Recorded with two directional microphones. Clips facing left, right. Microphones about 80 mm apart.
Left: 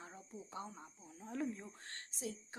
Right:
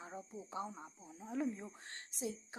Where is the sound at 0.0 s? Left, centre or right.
Centre.